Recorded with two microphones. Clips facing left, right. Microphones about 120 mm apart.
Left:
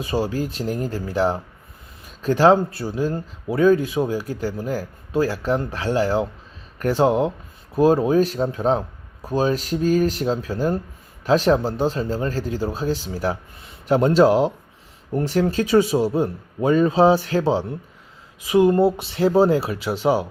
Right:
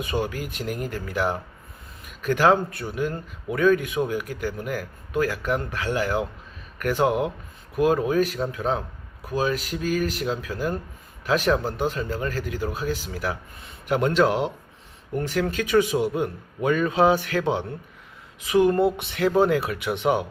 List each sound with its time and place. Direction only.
0.0 s speech: 30° left (ahead or behind)